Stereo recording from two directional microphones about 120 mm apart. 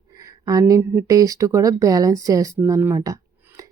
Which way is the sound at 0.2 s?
30° right (ahead or behind).